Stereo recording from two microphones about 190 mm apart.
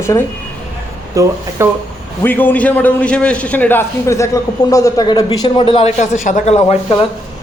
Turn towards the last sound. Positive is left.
turn(degrees=30)  # may be behind; listen again after turning